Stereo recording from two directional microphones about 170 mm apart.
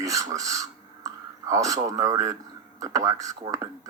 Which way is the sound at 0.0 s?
20° right (ahead or behind).